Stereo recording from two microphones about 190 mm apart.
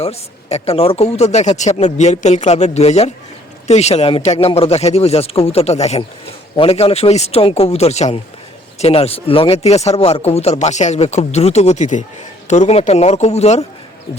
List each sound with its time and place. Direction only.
0.0 s speech: 35° left (ahead or behind)